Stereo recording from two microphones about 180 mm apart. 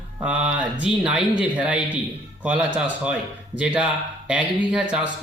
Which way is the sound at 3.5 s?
5° right (ahead or behind).